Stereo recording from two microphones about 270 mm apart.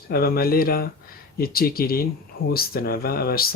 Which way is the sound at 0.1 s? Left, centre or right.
Left.